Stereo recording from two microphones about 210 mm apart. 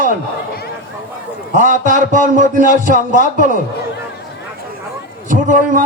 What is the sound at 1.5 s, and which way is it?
A man's voice, 40° right (ahead or behind).